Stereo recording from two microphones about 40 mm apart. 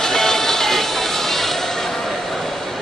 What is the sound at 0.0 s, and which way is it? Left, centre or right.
Music, centre.